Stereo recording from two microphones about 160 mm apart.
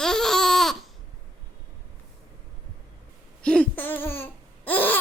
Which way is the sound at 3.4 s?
5° left (ahead or behind).